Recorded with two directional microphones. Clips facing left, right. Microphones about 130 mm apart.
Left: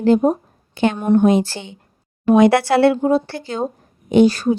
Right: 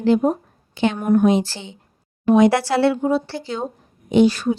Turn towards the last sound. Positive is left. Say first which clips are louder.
# left 2 dB
turn(degrees=40)  # may be behind; listen again after turning